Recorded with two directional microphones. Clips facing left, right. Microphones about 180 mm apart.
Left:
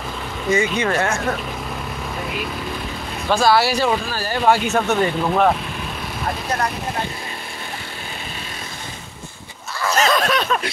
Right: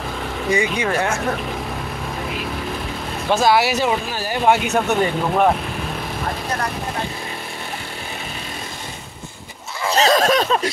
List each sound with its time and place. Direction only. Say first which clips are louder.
0.5 s speech: left 1 dB; 15° right (ahead or behind)
3.3 s speech: even; 20° right (ahead or behind)
9.8 s a sound: right 2 dB; 30° right (ahead or behind)